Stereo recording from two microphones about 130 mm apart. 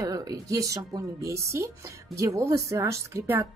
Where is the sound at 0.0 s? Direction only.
30° right (ahead or behind).